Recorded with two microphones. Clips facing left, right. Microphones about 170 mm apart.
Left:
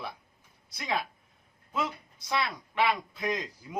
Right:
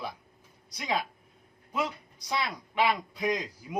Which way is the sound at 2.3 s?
15° right (ahead or behind).